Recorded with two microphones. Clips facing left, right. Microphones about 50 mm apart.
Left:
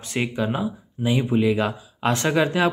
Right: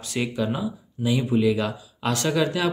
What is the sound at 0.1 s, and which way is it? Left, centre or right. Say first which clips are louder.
Speech: left 1 dB; left.